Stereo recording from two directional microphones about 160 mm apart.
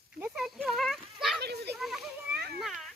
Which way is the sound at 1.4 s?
90° right.